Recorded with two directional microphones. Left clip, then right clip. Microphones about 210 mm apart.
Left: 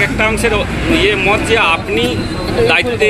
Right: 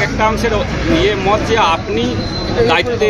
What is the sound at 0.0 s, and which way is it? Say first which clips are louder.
Speech: left 1 dB; 40° right (ahead or behind).